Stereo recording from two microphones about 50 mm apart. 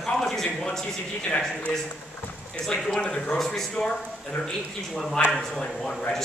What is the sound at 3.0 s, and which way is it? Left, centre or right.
Speech, left.